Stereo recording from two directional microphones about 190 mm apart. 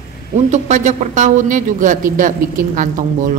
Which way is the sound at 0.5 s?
40° right (ahead or behind).